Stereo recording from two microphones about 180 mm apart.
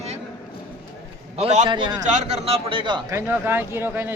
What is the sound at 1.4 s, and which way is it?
Speech, 35° right (ahead or behind).